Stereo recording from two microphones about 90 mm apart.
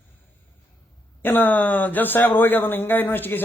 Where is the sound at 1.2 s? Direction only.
20° left (ahead or behind).